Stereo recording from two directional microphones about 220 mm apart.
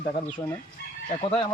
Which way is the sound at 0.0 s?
25° left (ahead or behind).